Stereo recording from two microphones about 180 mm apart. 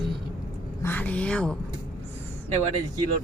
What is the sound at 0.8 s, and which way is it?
Speech, 10° left (ahead or behind).